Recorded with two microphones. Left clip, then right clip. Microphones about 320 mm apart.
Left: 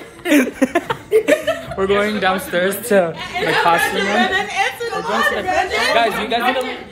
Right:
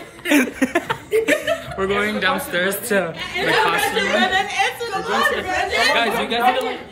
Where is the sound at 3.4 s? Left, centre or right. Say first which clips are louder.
Left 1 dB; centre.